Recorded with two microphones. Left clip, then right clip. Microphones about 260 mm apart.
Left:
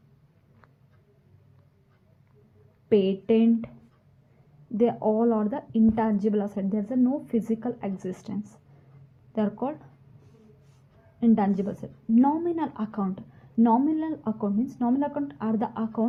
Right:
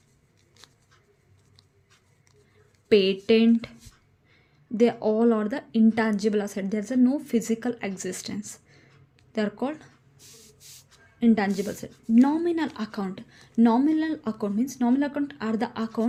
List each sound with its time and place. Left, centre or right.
2.9 s speech: right
4.8 s speech: right
8.4 s speech: right
9.3 s speech: right
11.2 s speech: centre